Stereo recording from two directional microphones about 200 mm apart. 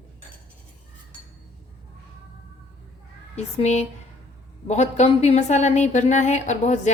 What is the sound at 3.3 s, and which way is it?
Speech, 35° left (ahead or behind).